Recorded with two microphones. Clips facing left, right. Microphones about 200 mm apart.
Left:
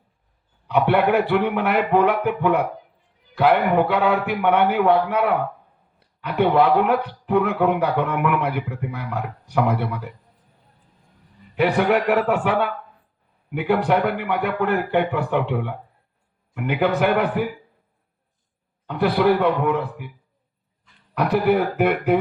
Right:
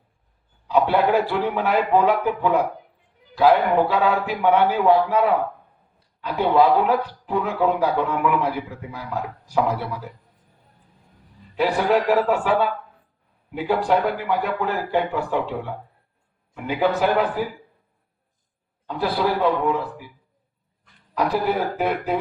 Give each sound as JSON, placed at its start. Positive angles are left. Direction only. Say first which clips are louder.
{"t": 0.7, "sound": "speech", "louder": "even", "side_deg": 65}
{"t": 6.2, "sound": "speech", "louder": "even", "side_deg": 60}
{"t": 11.5, "sound": "speech", "louder": "left 1 dB", "side_deg": 60}
{"t": 18.9, "sound": "speech", "louder": "left 5 dB", "side_deg": 60}
{"t": 21.2, "sound": "speech", "louder": "left 3 dB", "side_deg": 60}